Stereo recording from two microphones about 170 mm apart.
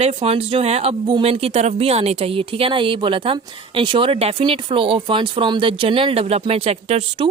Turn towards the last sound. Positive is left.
turn(degrees=-35)  # may be behind; listen again after turning